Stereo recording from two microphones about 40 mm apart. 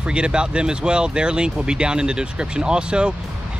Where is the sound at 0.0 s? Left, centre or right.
Right.